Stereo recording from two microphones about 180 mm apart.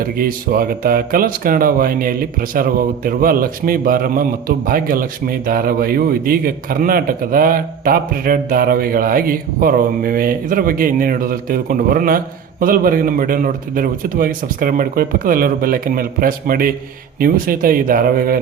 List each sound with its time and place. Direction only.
0.0 s a man's voice: 55° right (ahead or behind)